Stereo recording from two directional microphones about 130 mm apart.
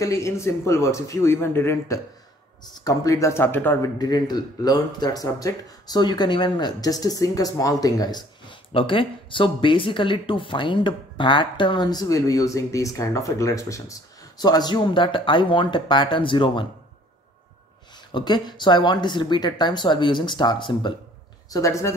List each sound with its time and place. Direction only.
0.0 s speech: 25° left (ahead or behind)
2.6 s speech: 30° left (ahead or behind)
4.0 s speech: 30° left (ahead or behind)
18.1 s speech: 35° left (ahead or behind)
21.5 s speech: 25° left (ahead or behind)